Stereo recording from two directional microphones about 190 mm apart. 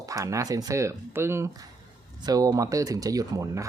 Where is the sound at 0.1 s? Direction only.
15° right (ahead or behind).